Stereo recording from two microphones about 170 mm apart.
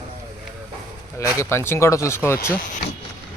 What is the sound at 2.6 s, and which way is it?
Speech, 50° left (ahead or behind).